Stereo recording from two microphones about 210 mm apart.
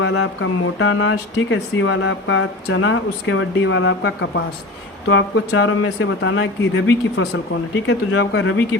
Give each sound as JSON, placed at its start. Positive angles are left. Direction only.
{"t": 0.0, "sound": "speech", "side_deg": 70}